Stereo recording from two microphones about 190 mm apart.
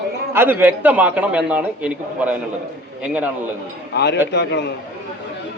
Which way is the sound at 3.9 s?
65° left (ahead or behind).